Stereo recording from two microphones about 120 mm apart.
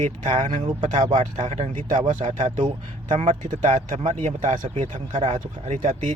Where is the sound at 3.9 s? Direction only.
80° right.